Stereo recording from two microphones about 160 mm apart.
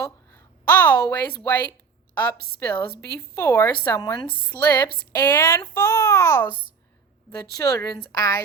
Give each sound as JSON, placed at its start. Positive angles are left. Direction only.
{"t": 0.0, "sound": "a woman's voice", "side_deg": 15}